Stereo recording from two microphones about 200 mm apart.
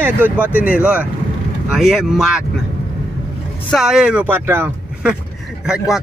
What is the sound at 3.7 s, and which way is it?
Speech, centre (ahead or behind).